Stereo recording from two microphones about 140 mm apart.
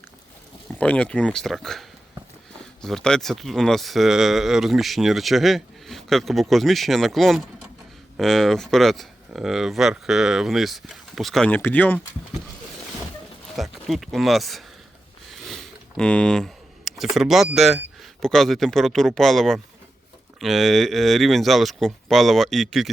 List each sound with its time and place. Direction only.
0.7 s speech: 10° left (ahead or behind)
11.5 s speech: 10° left (ahead or behind)
13.6 s speech: centre (ahead or behind)
15.4 s a sound: 5° left (ahead or behind)
18.0 s speech: 5° left (ahead or behind)